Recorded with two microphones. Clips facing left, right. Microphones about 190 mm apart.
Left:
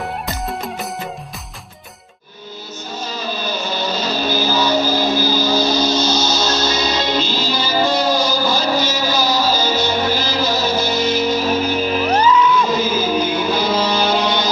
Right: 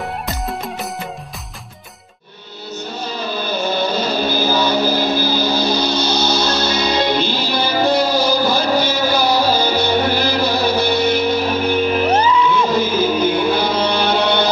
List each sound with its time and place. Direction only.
0.0 s music: centre (ahead or behind)
3.1 s music: 55° right (ahead or behind)
12.1 s music: 30° right (ahead or behind)
13.2 s music: 55° right (ahead or behind)